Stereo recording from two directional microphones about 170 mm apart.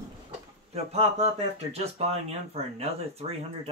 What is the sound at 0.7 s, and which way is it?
Speech, 40° right (ahead or behind).